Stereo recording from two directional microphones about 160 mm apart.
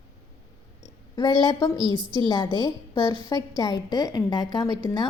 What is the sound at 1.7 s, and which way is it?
Speech, 30° right (ahead or behind).